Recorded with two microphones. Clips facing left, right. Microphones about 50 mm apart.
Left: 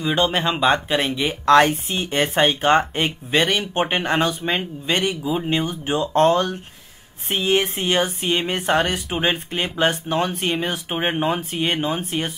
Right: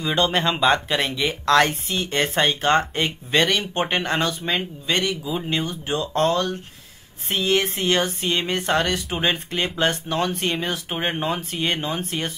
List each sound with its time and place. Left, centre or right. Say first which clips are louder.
0.0 s speech: left 1 dB; centre; by 6.6 s left
7.2 s speech: left 1 dB; left